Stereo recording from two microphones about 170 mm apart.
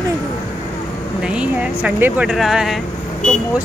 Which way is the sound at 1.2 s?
5° right (ahead or behind).